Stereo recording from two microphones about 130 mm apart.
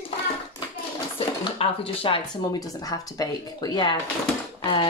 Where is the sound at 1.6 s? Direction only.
40° left (ahead or behind).